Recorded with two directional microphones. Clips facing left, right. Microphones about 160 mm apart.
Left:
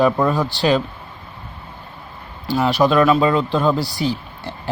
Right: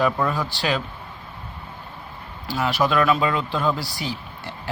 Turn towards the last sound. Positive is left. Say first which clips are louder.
# left 8 dB
turn(degrees=25)  # may be behind; listen again after turning